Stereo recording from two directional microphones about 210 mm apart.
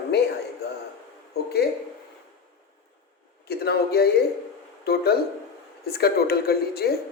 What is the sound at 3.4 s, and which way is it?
A woman's voice, 50° left (ahead or behind).